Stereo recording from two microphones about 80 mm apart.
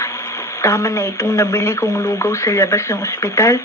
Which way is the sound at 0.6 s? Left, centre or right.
Left.